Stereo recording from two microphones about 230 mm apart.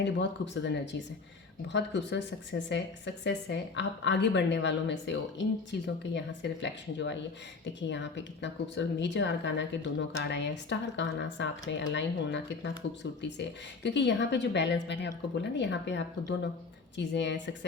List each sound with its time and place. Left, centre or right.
0.0 s a woman's voice: left
13.8 s a woman's voice: left